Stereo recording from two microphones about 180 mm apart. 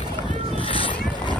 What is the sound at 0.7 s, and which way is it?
Boat, 30° left (ahead or behind).